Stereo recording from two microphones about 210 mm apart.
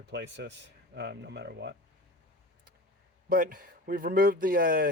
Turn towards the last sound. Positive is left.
turn(degrees=-45)  # may be behind; listen again after turning